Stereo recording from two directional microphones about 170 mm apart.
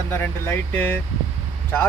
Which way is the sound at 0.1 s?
15° left (ahead or behind).